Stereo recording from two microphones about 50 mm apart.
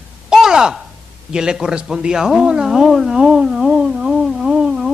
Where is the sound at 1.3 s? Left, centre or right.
Centre.